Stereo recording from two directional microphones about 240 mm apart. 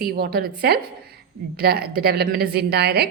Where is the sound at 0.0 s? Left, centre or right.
Right.